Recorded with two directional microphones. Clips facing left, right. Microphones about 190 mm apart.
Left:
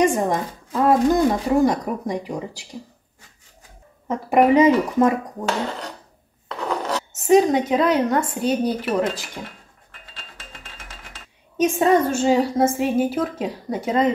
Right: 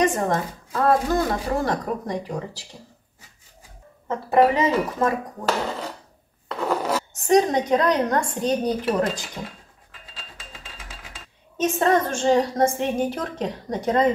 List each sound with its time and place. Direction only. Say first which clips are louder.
0.0 s a woman's voice: left 2 dB; 10° left (ahead or behind)
4.1 s a woman's voice: left 2 dB; 15° left (ahead or behind)
5.4 s speech: even; 5° right (ahead or behind)
6.5 s a sound: right 1 dB; 5° right (ahead or behind)
7.2 s speech: left 3 dB; 5° left (ahead or behind)
11.5 s a woman's voice: left 3 dB; 10° left (ahead or behind)